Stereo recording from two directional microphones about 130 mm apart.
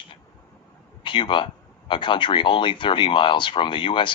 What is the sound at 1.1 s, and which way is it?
Speech, 40° left (ahead or behind).